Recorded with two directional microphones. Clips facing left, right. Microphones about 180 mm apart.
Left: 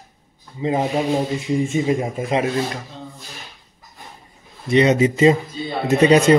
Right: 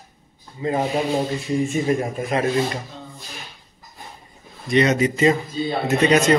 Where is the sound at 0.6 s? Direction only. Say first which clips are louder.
Left 2 dB; 20° left (ahead or behind).